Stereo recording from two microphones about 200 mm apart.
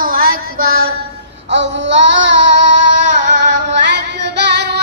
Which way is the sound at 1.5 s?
65° right (ahead or behind).